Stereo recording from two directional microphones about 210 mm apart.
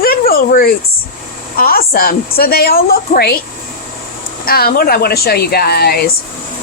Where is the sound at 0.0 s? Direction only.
45° left (ahead or behind).